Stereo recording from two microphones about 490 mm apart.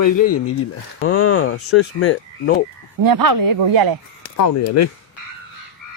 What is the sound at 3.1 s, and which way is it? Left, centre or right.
Speech, right.